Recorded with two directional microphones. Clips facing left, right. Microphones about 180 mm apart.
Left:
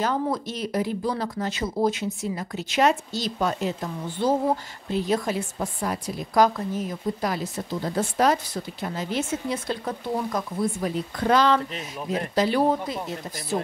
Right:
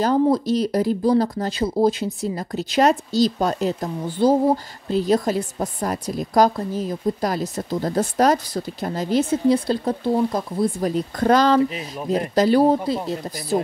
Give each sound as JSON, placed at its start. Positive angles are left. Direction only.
{"t": 0.0, "sound": "a woman's voice", "side_deg": -35}